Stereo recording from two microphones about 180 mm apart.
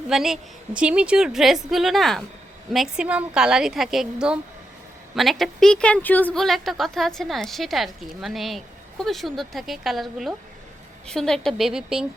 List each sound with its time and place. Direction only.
0.1 s a woman's voice: centre (ahead or behind)